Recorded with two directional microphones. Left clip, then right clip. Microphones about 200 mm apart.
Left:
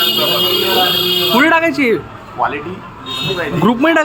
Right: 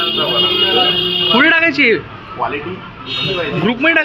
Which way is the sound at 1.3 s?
10° left (ahead or behind).